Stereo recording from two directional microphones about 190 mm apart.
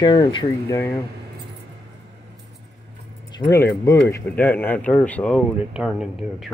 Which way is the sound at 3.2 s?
20° left (ahead or behind).